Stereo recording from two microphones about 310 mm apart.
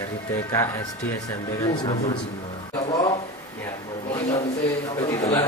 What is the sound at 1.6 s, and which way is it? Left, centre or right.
Speech, centre.